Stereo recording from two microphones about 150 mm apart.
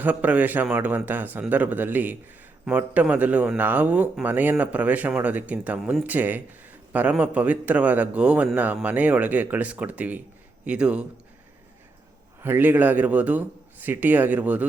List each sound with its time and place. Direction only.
0.0 s a man's voice: 10° right (ahead or behind)
12.4 s a man's voice: 15° right (ahead or behind)